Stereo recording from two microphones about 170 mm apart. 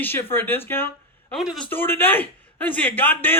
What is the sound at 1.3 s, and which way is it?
Speech, centre (ahead or behind).